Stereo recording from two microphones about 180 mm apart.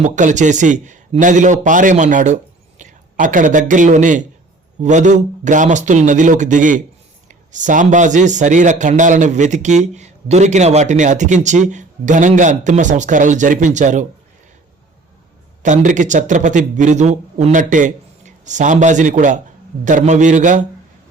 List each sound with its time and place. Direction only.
0.0 s a man's voice: 45° right (ahead or behind)
15.6 s speech: 45° right (ahead or behind)